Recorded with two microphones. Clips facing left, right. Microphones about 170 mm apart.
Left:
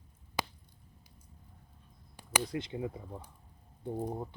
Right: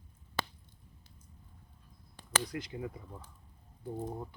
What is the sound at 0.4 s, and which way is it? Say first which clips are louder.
Chop: left 1 dB; 10° left (ahead or behind).